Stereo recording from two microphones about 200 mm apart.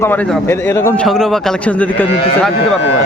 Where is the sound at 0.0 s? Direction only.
10° left (ahead or behind).